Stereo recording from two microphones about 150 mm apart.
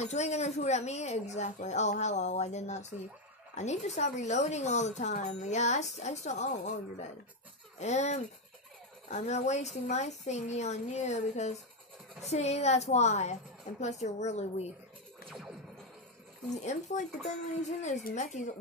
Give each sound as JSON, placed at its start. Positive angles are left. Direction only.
{"t": 0.0, "sound": "speech", "side_deg": 50}
{"t": 15.2, "sound": "music", "side_deg": -10}
{"t": 16.4, "sound": "speech", "side_deg": 50}
{"t": 18.1, "sound": "speech", "side_deg": 50}